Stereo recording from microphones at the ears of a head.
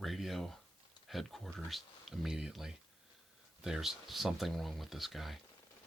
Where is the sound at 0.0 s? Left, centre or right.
Centre.